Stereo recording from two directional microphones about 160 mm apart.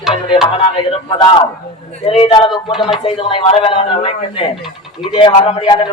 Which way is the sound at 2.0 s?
35° left (ahead or behind).